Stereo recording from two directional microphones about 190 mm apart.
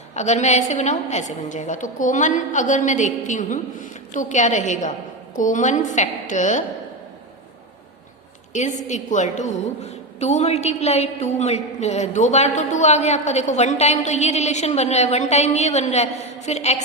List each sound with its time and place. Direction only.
0.1 s a woman's voice: 35° left (ahead or behind)
8.5 s a woman's voice: 40° left (ahead or behind)